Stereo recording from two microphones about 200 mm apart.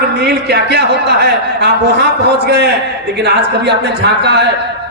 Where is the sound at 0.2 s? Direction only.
55° right (ahead or behind).